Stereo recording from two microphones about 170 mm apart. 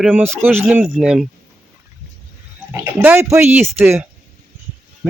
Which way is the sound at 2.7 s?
15° right (ahead or behind).